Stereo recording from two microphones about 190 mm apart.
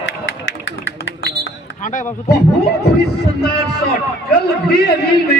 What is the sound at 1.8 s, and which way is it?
Speech, 45° left (ahead or behind).